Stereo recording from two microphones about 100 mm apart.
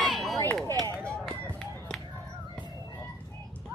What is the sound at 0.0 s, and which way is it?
Chop, centre (ahead or behind).